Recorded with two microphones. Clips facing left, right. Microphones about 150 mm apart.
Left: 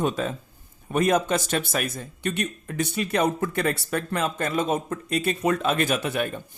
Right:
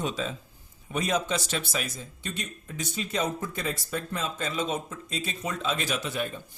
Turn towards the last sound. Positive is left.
turn(degrees=60)  # may be behind; listen again after turning